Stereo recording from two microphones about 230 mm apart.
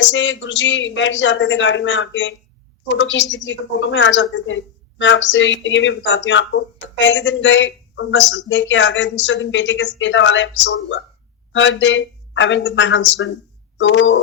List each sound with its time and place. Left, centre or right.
0.0 s speech: left